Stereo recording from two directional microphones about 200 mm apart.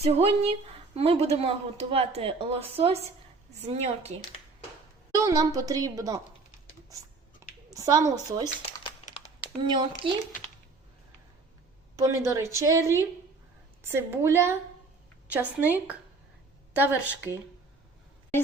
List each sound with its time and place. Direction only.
0.0 s a woman's voice: 30° right (ahead or behind)
5.1 s speech: 15° right (ahead or behind)
7.7 s speech: 15° right (ahead or behind)
8.8 s a sound: 30° left (ahead or behind)
9.6 s a woman's voice: 25° right (ahead or behind)
11.9 s speech: 15° right (ahead or behind)